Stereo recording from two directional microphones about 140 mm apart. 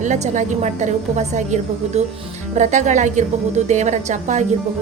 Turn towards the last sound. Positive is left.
turn(degrees=-60)  # may be behind; listen again after turning